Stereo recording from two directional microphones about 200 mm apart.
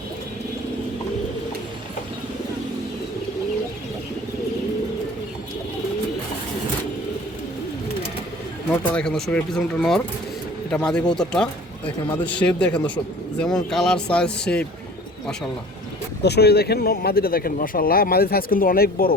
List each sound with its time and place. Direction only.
8.7 s speech: 5° left (ahead or behind)
16.2 s speech: 55° left (ahead or behind)